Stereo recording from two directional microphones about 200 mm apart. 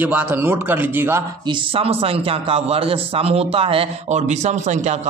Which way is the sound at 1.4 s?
25° right (ahead or behind).